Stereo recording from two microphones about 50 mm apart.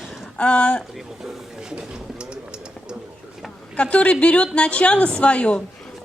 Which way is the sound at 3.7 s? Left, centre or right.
Left.